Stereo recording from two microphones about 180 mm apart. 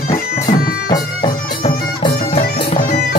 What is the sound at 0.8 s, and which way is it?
Music, 25° left (ahead or behind).